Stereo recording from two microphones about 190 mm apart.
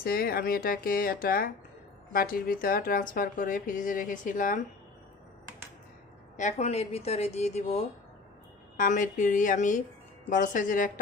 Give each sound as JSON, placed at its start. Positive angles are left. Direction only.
{"t": 0.0, "sound": "a woman's voice", "side_deg": 50}
{"t": 6.3, "sound": "a woman's voice", "side_deg": 40}